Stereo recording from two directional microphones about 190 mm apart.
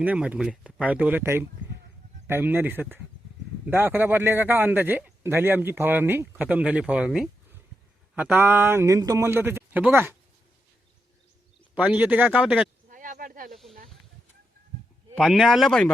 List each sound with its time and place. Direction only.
0.0 s a man's voice: 10° right (ahead or behind)
11.7 s a man's voice: 5° right (ahead or behind)
12.9 s a sound: 45° right (ahead or behind)
13.5 s snake: centre (ahead or behind)
15.1 s speech: centre (ahead or behind)